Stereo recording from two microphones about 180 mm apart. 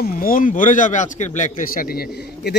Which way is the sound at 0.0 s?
50° left (ahead or behind).